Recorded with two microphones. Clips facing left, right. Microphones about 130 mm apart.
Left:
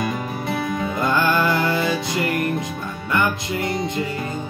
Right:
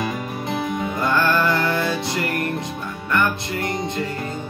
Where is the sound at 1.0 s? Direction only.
10° left (ahead or behind).